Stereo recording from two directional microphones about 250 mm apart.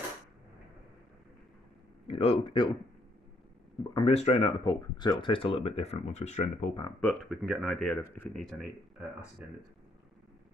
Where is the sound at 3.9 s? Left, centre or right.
Left.